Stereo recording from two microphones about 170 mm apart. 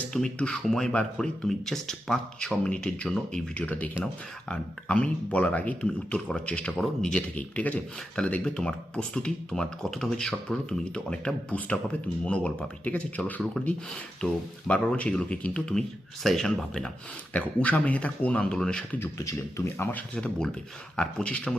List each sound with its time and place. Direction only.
0.1 s speech: 5° left (ahead or behind)
19.2 s speech: 15° left (ahead or behind)
20.1 s speech: 5° left (ahead or behind)